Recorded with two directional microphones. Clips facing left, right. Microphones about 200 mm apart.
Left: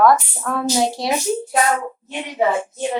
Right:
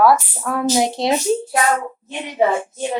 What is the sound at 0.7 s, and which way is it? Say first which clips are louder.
Speech: right 2 dB; 20° right (ahead or behind).